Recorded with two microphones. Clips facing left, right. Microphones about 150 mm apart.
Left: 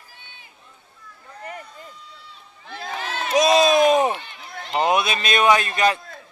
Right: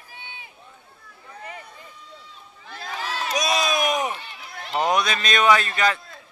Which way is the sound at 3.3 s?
25° left (ahead or behind).